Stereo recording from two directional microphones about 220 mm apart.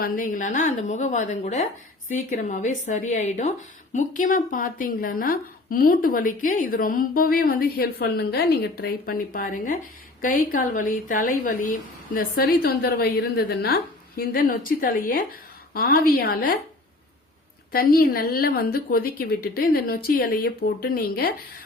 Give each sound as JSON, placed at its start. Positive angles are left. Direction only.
{"t": 0.0, "sound": "a woman's voice", "side_deg": 35}
{"t": 17.7, "sound": "a woman's voice", "side_deg": 40}